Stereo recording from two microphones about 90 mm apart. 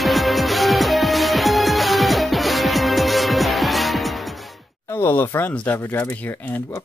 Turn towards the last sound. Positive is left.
turn(degrees=20)  # may be behind; listen again after turning